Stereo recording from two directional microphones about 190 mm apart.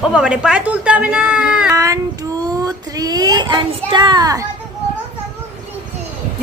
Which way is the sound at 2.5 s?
20° right (ahead or behind).